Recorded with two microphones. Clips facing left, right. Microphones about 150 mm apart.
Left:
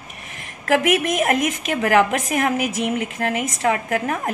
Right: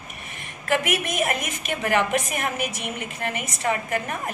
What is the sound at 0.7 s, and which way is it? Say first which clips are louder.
A woman's voice: left 6 dB; 90° left.